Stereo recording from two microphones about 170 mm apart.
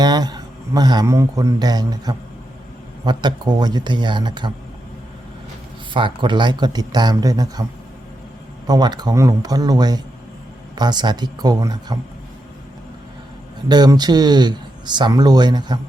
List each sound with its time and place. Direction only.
0.0 s speech: 25° right (ahead or behind)
5.9 s speech: 30° right (ahead or behind)
8.6 s speech: 25° right (ahead or behind)
13.7 s speech: 25° right (ahead or behind)